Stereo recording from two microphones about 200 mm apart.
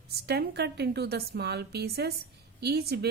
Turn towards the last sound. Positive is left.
turn(degrees=-55)  # may be behind; listen again after turning